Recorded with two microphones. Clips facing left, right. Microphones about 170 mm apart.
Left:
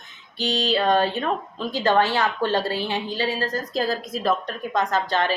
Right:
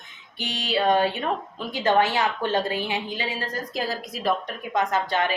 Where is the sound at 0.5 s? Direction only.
40° left (ahead or behind).